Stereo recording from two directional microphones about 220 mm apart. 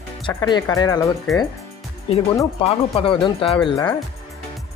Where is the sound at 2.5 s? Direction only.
25° left (ahead or behind).